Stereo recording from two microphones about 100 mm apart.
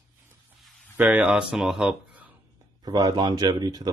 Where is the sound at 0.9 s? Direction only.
15° right (ahead or behind).